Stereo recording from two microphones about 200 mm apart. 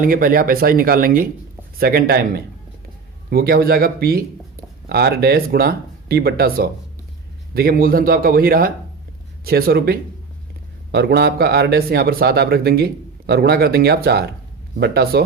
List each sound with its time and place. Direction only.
0.0 s speech: 45° right (ahead or behind)